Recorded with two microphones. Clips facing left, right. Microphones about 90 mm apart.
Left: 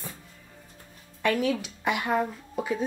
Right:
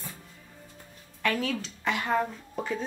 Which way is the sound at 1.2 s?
20° left (ahead or behind).